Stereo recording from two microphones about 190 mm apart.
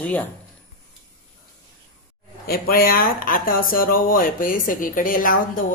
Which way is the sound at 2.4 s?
50° left (ahead or behind).